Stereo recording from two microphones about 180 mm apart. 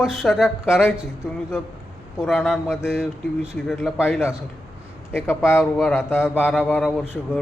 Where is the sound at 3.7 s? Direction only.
10° left (ahead or behind).